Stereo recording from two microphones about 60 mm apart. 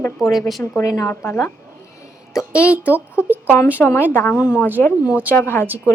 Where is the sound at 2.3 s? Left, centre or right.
Left.